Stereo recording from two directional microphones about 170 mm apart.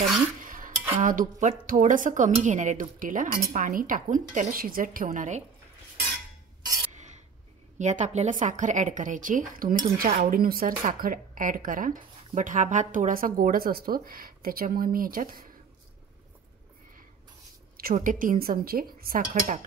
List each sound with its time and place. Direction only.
0.4 s dishes: 50° right (ahead or behind)
1.0 s a woman's voice: 50° right (ahead or behind)
6.9 s a sound: 45° right (ahead or behind)
7.8 s a woman's voice: 45° right (ahead or behind)
17.7 s a woman's voice: 55° right (ahead or behind)